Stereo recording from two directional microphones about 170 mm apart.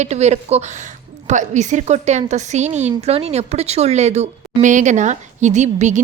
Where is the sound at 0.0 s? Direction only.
40° right (ahead or behind).